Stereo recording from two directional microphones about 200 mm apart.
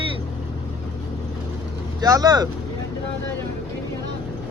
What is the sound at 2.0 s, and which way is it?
Speech, 20° right (ahead or behind).